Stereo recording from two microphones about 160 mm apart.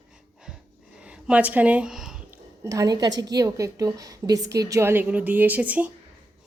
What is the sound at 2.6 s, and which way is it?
A woman's voice, 20° right (ahead or behind).